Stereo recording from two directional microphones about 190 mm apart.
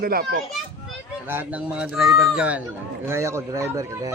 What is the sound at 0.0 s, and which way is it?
Speech, 50° right (ahead or behind).